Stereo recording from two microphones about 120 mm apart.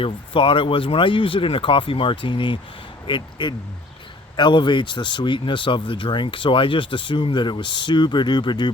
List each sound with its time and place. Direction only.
0.0 s speech: 45° left (ahead or behind)